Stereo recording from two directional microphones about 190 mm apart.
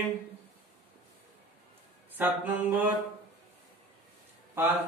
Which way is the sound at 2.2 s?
10° right (ahead or behind).